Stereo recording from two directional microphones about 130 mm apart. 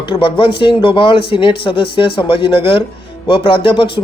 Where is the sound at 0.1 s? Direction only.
40° left (ahead or behind).